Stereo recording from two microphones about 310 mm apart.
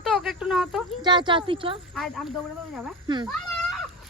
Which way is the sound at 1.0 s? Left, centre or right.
Centre.